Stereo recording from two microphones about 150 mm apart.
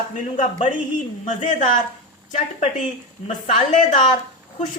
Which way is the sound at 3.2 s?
45° left (ahead or behind).